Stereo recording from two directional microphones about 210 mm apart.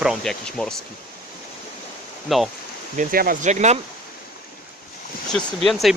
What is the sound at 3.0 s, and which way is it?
Speech, 45° right (ahead or behind).